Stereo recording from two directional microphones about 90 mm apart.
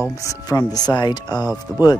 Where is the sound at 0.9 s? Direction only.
55° left (ahead or behind).